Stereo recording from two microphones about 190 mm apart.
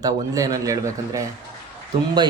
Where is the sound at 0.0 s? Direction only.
20° right (ahead or behind).